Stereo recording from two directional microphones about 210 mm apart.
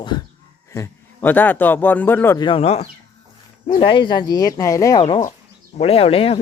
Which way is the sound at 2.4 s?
25° left (ahead or behind).